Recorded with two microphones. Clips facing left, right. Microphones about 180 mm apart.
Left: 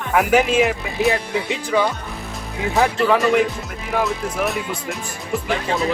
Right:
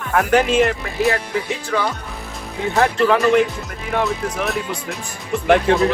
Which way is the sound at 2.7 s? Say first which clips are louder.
Right 1 dB; centre (ahead or behind).